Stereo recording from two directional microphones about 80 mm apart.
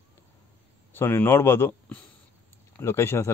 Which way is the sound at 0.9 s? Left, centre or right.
Left.